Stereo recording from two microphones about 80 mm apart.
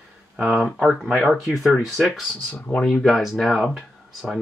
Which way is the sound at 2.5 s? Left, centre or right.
Left.